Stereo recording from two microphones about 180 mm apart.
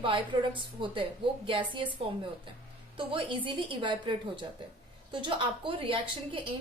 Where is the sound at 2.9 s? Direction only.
30° right (ahead or behind).